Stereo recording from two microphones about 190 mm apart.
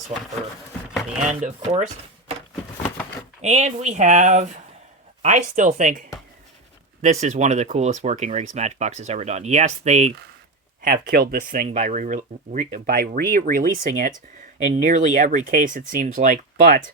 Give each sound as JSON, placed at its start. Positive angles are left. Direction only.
{"t": 1.2, "sound": "speech", "side_deg": -40}
{"t": 3.4, "sound": "speech", "side_deg": -35}
{"t": 10.8, "sound": "speech", "side_deg": -50}